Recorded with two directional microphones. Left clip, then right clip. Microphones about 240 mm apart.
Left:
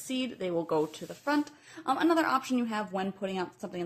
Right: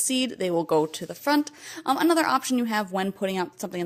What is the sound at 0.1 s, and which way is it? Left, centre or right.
A woman's voice, right.